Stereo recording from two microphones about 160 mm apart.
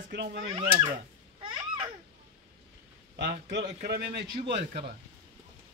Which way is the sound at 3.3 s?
90° right.